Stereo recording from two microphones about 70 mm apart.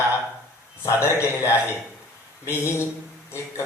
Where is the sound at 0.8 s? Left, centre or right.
Left.